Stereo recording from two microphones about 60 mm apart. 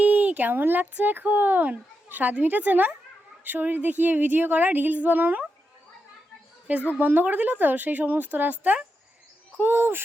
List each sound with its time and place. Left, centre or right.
0.0 s speech: right
6.7 s a woman's voice: right